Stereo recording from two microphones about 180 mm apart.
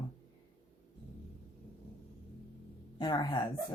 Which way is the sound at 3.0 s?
25° left (ahead or behind).